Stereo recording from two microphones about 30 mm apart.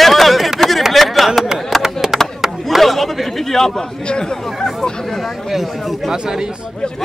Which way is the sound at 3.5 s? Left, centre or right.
Centre.